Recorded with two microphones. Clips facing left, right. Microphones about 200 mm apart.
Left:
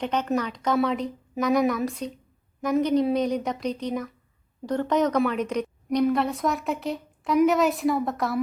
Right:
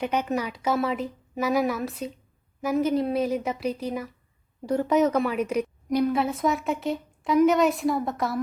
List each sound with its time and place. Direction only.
0.0 s a woman's voice: 10° right (ahead or behind)